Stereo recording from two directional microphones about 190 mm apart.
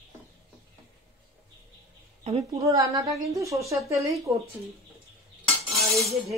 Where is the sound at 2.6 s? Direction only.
15° right (ahead or behind).